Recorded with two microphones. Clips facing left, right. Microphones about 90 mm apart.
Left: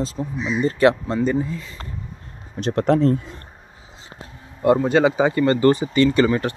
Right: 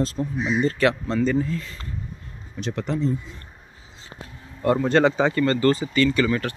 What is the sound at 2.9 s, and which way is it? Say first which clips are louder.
Speech: left 8 dB; 75° left (ahead or behind).